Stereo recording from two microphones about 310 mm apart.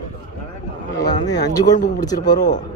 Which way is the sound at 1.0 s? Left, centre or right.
Centre.